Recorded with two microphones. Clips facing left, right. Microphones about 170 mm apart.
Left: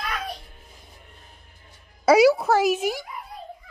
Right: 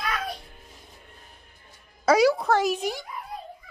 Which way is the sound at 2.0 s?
10° left (ahead or behind).